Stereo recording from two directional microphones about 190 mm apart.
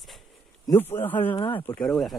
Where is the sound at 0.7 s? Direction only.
10° left (ahead or behind).